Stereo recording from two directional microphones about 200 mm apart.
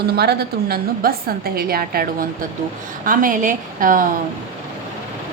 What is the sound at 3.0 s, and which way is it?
A woman's voice, 40° right (ahead or behind).